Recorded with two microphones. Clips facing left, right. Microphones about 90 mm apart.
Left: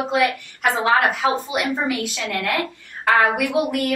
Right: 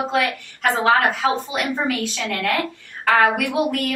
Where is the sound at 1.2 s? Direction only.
15° left (ahead or behind).